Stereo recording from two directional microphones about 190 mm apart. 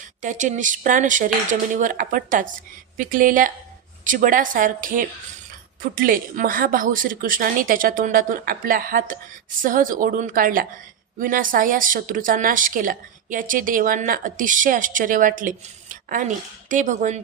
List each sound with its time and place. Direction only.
0.2 s a woman's voice: 40° right (ahead or behind)